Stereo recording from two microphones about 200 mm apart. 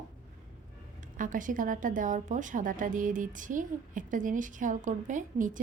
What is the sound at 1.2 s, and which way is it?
A woman's voice, 40° right (ahead or behind).